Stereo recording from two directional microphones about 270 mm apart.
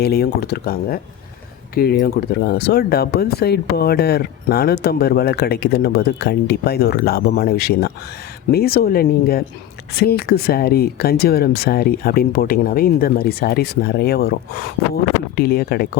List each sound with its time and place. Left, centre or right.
0.0 s speech: left
15.4 s speech: left